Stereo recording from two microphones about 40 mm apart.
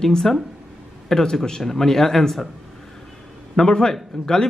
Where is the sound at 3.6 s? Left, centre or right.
Centre.